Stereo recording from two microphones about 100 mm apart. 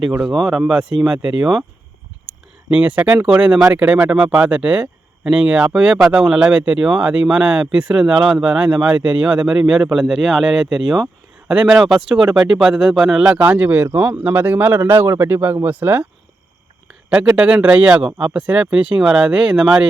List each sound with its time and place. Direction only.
0.1 s speech: 10° right (ahead or behind)
17.1 s speech: 10° right (ahead or behind)